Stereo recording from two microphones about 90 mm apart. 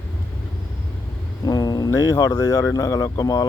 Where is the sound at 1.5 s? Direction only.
45° left (ahead or behind).